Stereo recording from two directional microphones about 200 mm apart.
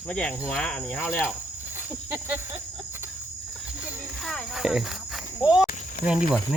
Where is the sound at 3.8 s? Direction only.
Centre (ahead or behind).